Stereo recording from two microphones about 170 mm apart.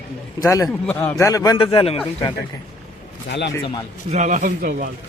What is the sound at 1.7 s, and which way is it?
Speech, 35° left (ahead or behind).